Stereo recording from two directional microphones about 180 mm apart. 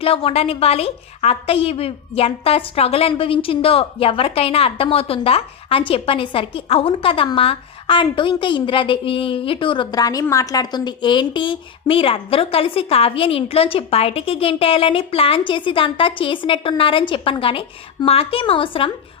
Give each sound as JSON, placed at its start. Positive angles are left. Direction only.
{"t": 0.0, "sound": "a woman's voice", "side_deg": 30}